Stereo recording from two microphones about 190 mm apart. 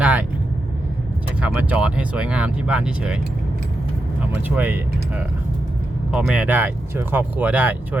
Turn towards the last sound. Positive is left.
turn(degrees=-10)  # may be behind; listen again after turning